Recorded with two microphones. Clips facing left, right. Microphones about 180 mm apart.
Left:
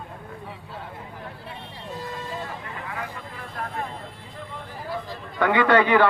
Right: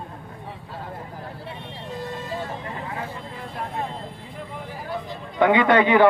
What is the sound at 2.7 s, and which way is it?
Vehicle, 30° right (ahead or behind).